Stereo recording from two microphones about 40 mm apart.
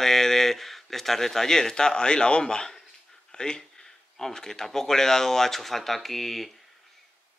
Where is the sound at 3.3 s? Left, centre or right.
Centre.